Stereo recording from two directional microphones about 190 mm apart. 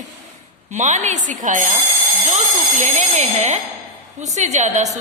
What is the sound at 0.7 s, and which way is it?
Speech, 40° right (ahead or behind).